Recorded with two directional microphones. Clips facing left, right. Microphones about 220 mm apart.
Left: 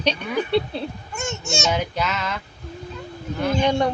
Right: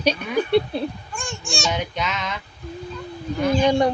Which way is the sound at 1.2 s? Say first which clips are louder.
Left 4 dB; 20° left (ahead or behind).